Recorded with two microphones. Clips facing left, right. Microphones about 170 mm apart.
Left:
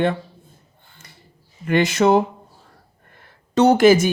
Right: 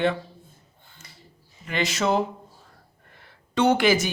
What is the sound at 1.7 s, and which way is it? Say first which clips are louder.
Speech: left 8 dB; 55° left (ahead or behind).